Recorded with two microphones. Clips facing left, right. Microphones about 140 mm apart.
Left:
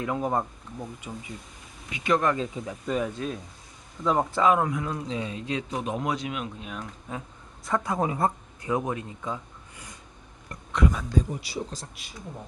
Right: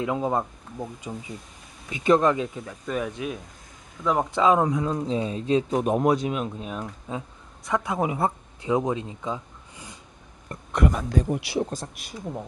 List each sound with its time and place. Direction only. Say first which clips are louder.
0.0 s speech: right 2 dB; 20° right (ahead or behind)
1.9 s speech: right 5 dB; 30° right (ahead or behind)
2.5 s speech: left 1 dB; 5° left (ahead or behind)
4.3 s speech: right 5 dB; 20° right (ahead or behind)
5.7 s speech: right 7 dB; 45° right (ahead or behind)
6.8 s speech: right 4 dB; 20° right (ahead or behind)
7.6 s speech: right 1 dB; centre (ahead or behind)
8.0 s speech: right 1 dB; 15° right (ahead or behind)
10.7 s speech: right 2 dB; 50° right (ahead or behind)